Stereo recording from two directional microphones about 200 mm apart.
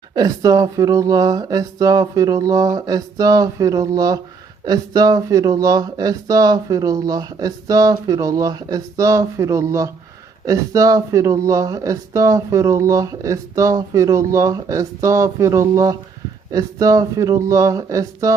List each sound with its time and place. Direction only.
0.1 s speech: 20° right (ahead or behind)